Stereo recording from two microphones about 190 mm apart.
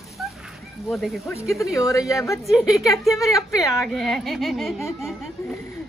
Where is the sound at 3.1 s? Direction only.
15° left (ahead or behind).